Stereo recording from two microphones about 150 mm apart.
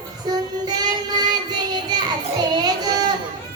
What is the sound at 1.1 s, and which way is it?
Music, 30° right (ahead or behind).